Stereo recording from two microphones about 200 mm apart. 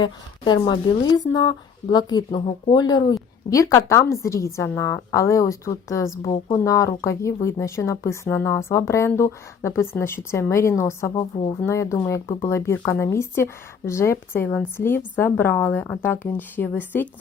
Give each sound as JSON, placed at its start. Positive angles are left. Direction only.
{"t": 0.0, "sound": "speech", "side_deg": 20}
{"t": 11.1, "sound": "speech", "side_deg": 25}
{"t": 11.6, "sound": "speech", "side_deg": 15}